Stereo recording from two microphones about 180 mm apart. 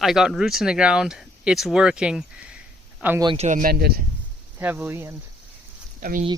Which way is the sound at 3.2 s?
25° right (ahead or behind).